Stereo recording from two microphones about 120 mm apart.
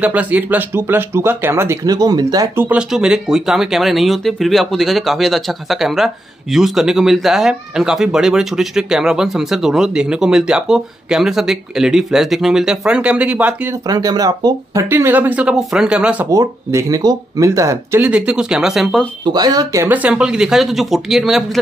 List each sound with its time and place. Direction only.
0.0 s speech: 10° right (ahead or behind); by 2.5 s 35° right (ahead or behind)
2.5 s speech: 20° right (ahead or behind)
2.9 s speech: 5° right (ahead or behind)
13.8 s speech: 30° right (ahead or behind); by 16.3 s 10° right (ahead or behind)
16.3 s speech: 25° right (ahead or behind)
18.0 s speech: 10° right (ahead or behind)
19.2 s speech: 35° right (ahead or behind)
19.9 s speech: 10° right (ahead or behind)